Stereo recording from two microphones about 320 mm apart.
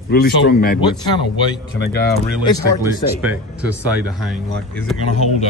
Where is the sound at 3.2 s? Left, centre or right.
Centre.